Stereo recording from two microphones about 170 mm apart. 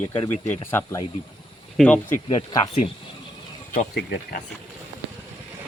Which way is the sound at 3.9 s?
70° left (ahead or behind).